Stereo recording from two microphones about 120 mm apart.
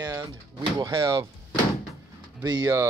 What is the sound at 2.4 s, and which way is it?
Speech, 35° right (ahead or behind).